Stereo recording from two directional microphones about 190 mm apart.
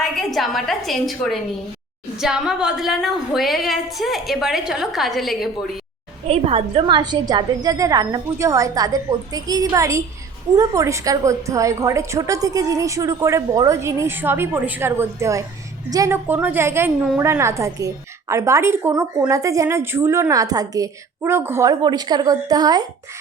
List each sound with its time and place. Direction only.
0.0 s a woman's voice: centre (ahead or behind)
6.2 s a woman's voice: 30° right (ahead or behind)